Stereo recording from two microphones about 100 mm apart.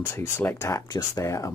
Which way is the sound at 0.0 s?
25° left (ahead or behind).